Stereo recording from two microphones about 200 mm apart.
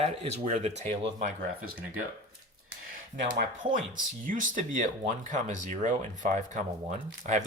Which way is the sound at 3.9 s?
40° right (ahead or behind).